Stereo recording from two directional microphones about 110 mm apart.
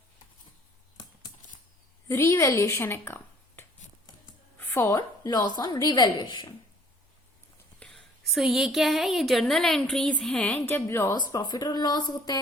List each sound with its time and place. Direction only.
2.0 s speech: 30° left (ahead or behind)
4.5 s music: 20° left (ahead or behind)
4.9 s a woman's voice: 35° left (ahead or behind)
7.8 s a woman's voice: 5° left (ahead or behind); by 11.2 s 20° left (ahead or behind)
11.2 s speech: 35° left (ahead or behind)